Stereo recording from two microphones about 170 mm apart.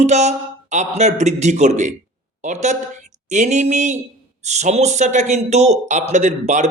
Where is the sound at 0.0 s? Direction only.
40° right (ahead or behind).